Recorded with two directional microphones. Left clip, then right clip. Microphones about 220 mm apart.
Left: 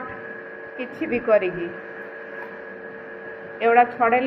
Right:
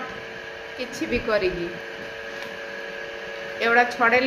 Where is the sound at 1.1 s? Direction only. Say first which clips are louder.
Left 4 dB; 15° right (ahead or behind).